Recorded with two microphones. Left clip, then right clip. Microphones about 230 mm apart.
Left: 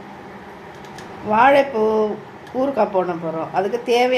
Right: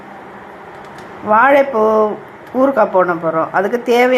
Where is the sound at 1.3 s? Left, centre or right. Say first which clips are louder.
Right 4 dB; centre.